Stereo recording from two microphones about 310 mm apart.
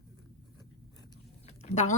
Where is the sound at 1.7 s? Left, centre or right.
Left.